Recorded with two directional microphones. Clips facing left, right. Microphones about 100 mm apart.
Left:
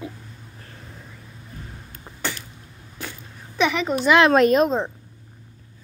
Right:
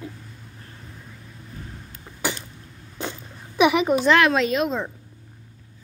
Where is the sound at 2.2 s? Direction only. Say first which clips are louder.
Right 2 dB; 20° right (ahead or behind).